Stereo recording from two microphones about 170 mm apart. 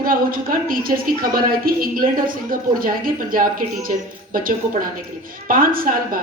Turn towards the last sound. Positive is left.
turn(degrees=-55)  # may be behind; listen again after turning